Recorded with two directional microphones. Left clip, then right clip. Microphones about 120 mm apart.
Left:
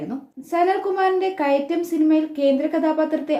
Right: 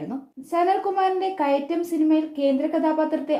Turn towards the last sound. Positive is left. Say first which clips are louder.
# left 2 dB
turn(degrees=-20)  # may be behind; listen again after turning